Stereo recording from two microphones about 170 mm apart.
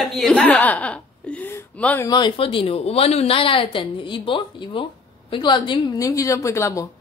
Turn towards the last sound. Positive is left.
turn(degrees=15)  # may be behind; listen again after turning